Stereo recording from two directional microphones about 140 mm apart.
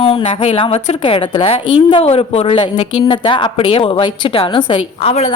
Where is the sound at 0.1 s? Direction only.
45° left (ahead or behind).